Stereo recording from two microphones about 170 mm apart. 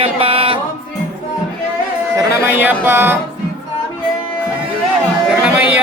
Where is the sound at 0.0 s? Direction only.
35° right (ahead or behind).